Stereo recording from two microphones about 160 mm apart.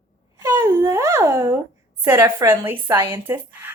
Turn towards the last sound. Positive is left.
turn(degrees=-10)  # may be behind; listen again after turning